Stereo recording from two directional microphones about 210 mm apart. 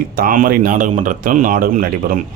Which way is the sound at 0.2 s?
40° right (ahead or behind).